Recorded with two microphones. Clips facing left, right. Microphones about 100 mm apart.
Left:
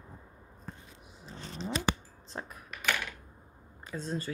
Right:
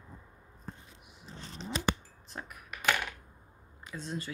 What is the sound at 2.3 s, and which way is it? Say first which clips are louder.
Speech: left 3 dB; 30° left (ahead or behind).